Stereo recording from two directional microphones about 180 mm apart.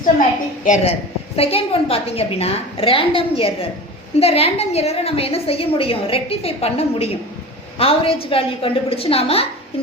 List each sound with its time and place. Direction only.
0.6 s a woman's voice: 45° left (ahead or behind)